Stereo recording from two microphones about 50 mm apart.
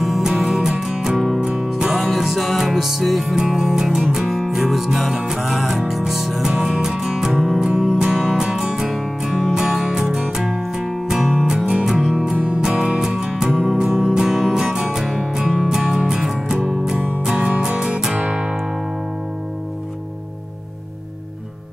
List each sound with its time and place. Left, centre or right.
0.0 s music: centre